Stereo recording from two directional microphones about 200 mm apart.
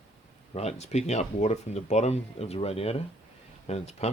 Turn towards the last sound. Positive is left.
turn(degrees=30)  # may be behind; listen again after turning